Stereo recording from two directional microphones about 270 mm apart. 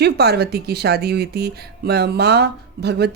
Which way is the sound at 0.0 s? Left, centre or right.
Right.